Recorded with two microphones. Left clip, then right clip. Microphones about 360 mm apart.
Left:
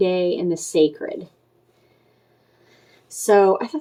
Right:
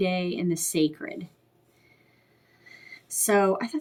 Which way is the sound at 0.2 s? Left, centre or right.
Right.